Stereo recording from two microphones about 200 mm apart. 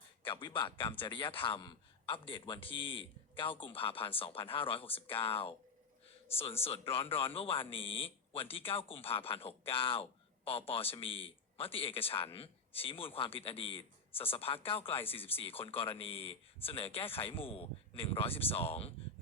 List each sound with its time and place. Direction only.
0.3 s speech: 25° left (ahead or behind)
6.6 s speech: 30° left (ahead or behind)